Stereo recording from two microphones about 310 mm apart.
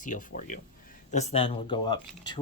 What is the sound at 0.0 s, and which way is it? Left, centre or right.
Speech, left.